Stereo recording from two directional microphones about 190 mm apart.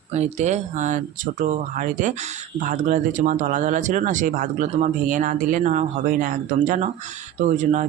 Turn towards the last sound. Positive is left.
turn(degrees=-40)  # may be behind; listen again after turning